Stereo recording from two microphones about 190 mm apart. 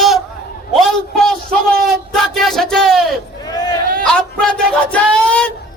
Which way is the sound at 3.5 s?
20° left (ahead or behind).